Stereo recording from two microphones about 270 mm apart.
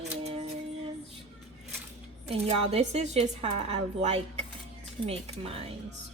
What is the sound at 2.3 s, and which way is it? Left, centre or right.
Speech, right.